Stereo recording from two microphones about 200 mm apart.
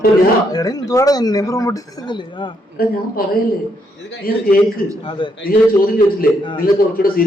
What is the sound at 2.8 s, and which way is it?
A man's voice, 45° left (ahead or behind).